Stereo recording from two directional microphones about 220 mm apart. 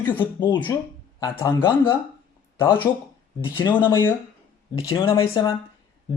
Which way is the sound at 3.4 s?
20° left (ahead or behind).